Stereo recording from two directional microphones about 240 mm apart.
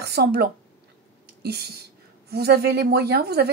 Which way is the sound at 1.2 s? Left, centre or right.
Right.